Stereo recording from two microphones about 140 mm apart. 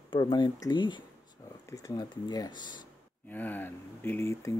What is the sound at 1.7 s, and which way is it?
Speech, 25° left (ahead or behind).